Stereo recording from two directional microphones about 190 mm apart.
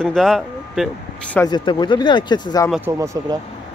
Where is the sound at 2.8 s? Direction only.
15° right (ahead or behind).